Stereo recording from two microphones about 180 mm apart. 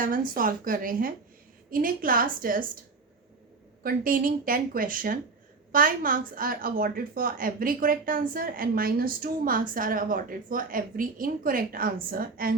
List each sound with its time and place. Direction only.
0.0 s speech: 50° right (ahead or behind)
3.8 s speech: 50° right (ahead or behind)